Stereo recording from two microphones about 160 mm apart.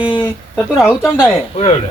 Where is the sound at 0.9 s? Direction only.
15° left (ahead or behind).